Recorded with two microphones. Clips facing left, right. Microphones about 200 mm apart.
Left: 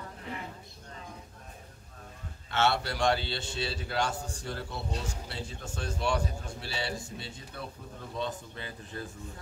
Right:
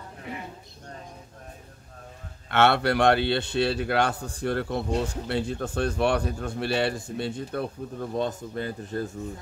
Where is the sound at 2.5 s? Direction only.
60° right (ahead or behind).